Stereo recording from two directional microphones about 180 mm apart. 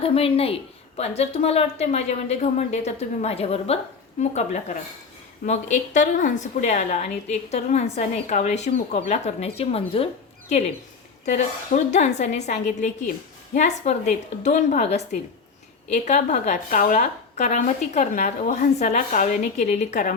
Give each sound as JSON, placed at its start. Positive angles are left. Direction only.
{"t": 0.0, "sound": "a woman's voice", "side_deg": 30}
{"t": 11.3, "sound": "a woman's voice", "side_deg": 40}